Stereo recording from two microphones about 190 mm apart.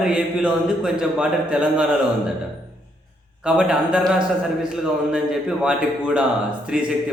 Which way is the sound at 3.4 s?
5° right (ahead or behind).